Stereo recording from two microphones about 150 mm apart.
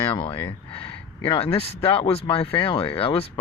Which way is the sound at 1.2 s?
40° left (ahead or behind).